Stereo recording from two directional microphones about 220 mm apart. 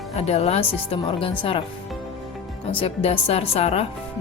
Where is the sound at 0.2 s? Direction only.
30° left (ahead or behind).